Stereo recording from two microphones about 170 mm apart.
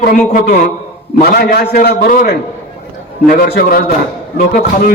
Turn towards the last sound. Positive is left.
turn(degrees=55)  # may be behind; listen again after turning